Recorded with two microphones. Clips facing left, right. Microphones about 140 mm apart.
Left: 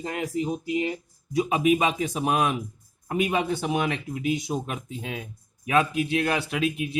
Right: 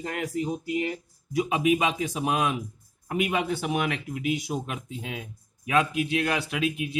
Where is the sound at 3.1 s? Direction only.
35° left (ahead or behind).